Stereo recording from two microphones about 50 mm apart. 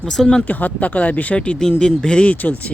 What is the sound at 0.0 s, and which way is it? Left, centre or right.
Speech, centre.